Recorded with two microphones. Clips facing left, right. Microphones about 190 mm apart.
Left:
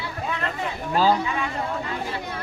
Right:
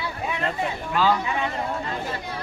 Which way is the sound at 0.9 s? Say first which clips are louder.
Left 2 dB; 35° left (ahead or behind).